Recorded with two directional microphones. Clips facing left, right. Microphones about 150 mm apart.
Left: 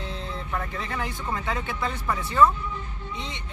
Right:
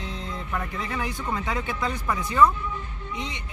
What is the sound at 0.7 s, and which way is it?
Speech, 15° right (ahead or behind).